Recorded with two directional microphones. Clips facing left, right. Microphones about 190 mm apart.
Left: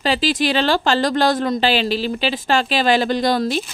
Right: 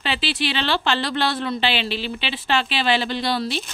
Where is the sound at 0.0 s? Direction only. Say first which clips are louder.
Left 6 dB; 40° left (ahead or behind).